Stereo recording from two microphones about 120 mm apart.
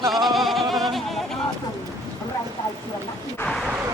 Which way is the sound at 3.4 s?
20° left (ahead or behind).